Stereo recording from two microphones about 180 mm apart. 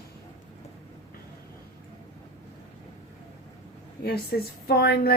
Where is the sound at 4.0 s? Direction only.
60° left (ahead or behind).